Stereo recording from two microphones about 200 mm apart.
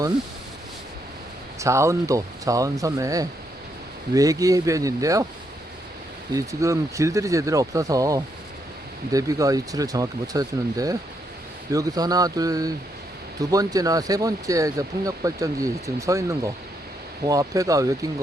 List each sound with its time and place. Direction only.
1.5 s speech: 15° right (ahead or behind)
6.3 s speech: 15° right (ahead or behind)